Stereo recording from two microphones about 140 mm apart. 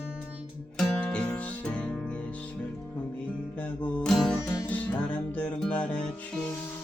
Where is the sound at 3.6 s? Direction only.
10° left (ahead or behind).